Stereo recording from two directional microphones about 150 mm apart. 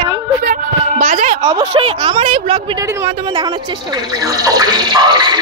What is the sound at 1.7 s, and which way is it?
Speech, 35° right (ahead or behind).